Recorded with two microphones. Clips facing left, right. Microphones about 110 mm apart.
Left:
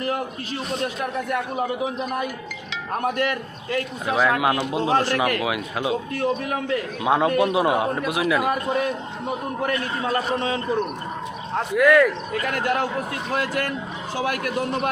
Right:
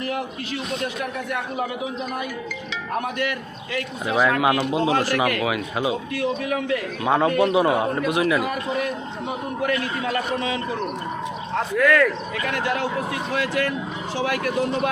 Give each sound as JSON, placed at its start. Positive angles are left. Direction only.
{"t": 0.0, "sound": "a man's voice", "side_deg": 40}
{"t": 3.0, "sound": "a man's voice", "side_deg": 40}
{"t": 4.0, "sound": "a man's voice", "side_deg": 0}
{"t": 6.1, "sound": "a man's voice", "side_deg": 35}
{"t": 7.0, "sound": "a man's voice", "side_deg": 5}
{"t": 9.6, "sound": "a man's voice", "side_deg": 30}
{"t": 11.7, "sound": "speech", "side_deg": 10}
{"t": 12.3, "sound": "a man's voice", "side_deg": 45}